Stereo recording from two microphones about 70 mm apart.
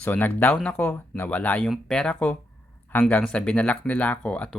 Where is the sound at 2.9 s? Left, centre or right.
Left.